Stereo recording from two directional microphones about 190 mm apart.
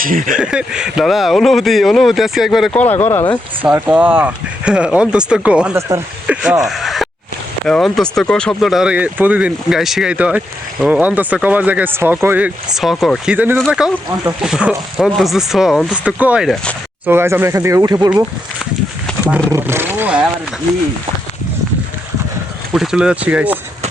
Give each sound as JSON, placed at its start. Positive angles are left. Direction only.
{"t": 0.0, "sound": "a sound", "side_deg": -45}
{"t": 0.3, "sound": "speech", "side_deg": -5}
{"t": 3.6, "sound": "speech", "side_deg": -10}
{"t": 17.1, "sound": "speech", "side_deg": -10}
{"t": 18.1, "sound": "a sound", "side_deg": -5}
{"t": 19.5, "sound": "speech", "side_deg": -15}
{"t": 22.7, "sound": "speech", "side_deg": 0}